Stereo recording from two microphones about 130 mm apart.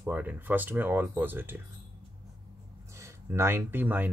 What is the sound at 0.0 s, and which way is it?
Speech, 15° right (ahead or behind).